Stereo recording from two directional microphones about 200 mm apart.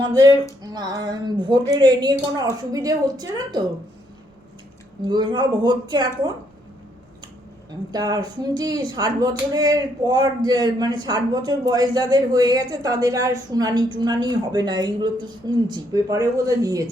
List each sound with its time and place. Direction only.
0.0 s speech: 20° right (ahead or behind)
5.0 s speech: 20° right (ahead or behind)
7.9 s speech: 20° right (ahead or behind)